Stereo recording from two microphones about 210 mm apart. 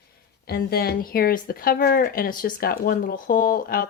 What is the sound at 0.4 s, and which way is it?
A woman's voice, 50° left (ahead or behind).